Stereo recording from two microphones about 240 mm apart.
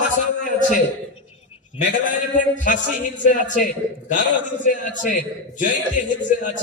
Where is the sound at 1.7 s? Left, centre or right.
Left.